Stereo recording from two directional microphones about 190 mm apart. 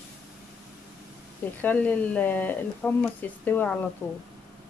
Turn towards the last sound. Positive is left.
turn(degrees=15)  # may be behind; listen again after turning